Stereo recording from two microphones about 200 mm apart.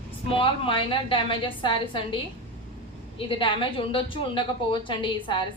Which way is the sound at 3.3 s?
25° left (ahead or behind).